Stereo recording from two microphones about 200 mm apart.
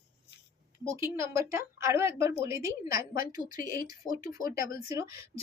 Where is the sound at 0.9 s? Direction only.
15° right (ahead or behind).